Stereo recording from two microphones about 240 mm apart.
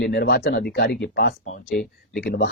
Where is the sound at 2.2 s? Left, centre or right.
Left.